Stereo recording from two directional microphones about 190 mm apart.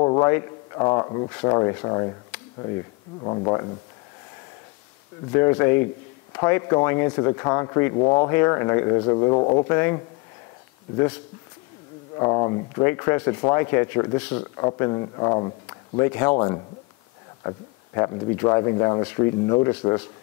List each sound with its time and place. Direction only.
0.0 s a sound: 25° left (ahead or behind)
0.3 s speech: 25° left (ahead or behind)
3.3 s speech: 25° left (ahead or behind)
5.3 s speech: 15° left (ahead or behind)
9.7 s speech: 15° left (ahead or behind)
12.2 s speech: 25° left (ahead or behind)